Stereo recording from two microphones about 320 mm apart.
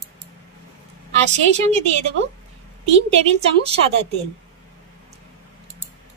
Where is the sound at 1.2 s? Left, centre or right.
Centre.